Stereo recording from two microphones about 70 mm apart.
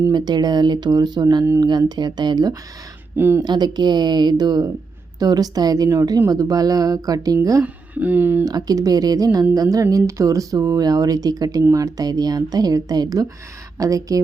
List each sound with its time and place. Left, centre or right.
0.1 s speech: right
3.2 s speech: right
3.4 s speech: right
5.2 s speech: right
7.6 s speech: right
8.4 s speech: right